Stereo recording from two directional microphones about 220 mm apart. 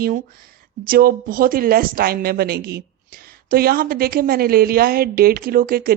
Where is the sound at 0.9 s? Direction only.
40° right (ahead or behind).